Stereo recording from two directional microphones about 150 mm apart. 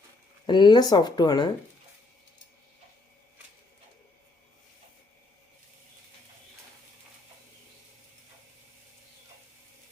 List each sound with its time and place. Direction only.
0.4 s speech: 30° left (ahead or behind)